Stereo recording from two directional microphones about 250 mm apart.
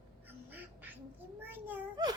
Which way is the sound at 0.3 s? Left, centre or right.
Centre.